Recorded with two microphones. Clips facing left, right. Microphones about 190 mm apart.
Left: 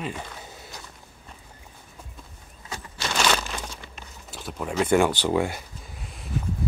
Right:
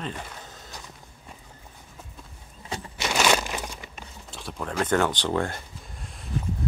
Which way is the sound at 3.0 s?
15° right (ahead or behind).